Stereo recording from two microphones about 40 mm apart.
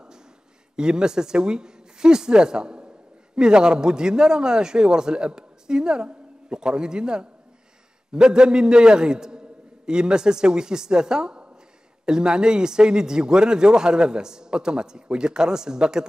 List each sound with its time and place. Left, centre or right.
0.7 s speech: centre